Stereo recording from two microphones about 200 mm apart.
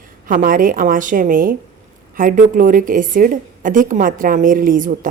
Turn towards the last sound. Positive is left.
turn(degrees=-40)  # may be behind; listen again after turning